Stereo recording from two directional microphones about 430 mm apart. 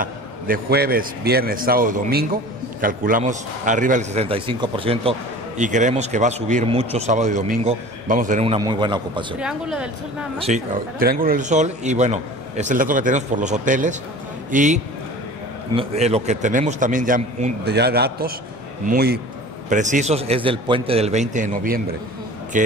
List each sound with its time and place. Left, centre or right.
0.0 s a man's voice: right; by 9.8 s centre
10.4 s a man's voice: centre